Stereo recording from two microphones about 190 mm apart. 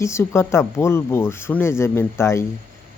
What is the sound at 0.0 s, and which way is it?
Speech, 15° left (ahead or behind).